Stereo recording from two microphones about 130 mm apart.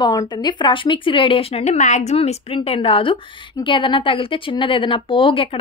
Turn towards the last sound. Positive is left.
turn(degrees=45)  # may be behind; listen again after turning